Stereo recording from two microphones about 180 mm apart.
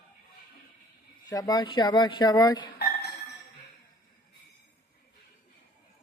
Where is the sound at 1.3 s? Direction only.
20° left (ahead or behind).